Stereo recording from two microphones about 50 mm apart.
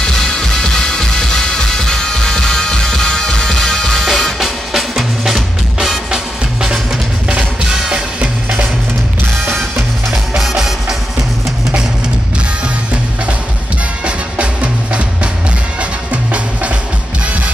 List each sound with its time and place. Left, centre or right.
0.0 s music: centre
4.0 s music: centre; by 8.6 s right
10.1 s music: centre
14.0 s music: right